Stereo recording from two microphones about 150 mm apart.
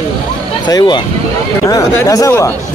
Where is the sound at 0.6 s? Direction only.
30° left (ahead or behind).